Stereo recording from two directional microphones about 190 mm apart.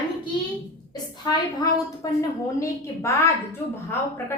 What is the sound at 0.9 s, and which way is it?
A woman's voice, 20° left (ahead or behind).